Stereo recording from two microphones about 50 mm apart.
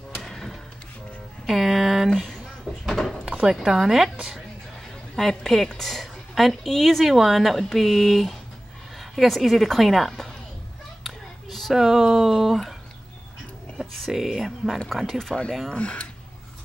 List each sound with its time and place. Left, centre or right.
0.1 s a sound: centre
1.4 s music: centre
2.0 s a sound: centre
3.6 s speech: centre
5.1 s a woman's voice: centre
11.1 s a sound: centre
11.7 s speech: centre
13.9 s speech: centre
14.9 s a woman's voice: centre
15.7 s speech: left